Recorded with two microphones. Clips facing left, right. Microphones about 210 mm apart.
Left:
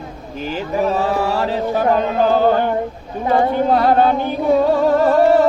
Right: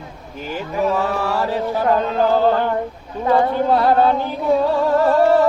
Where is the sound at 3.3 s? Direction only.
20° left (ahead or behind).